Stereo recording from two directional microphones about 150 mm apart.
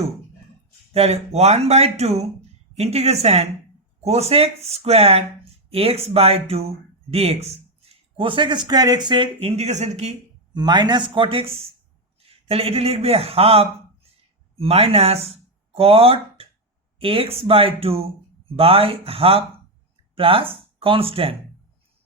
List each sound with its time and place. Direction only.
0.9 s speech: 45° right (ahead or behind)
10.5 s a man's voice: 30° right (ahead or behind)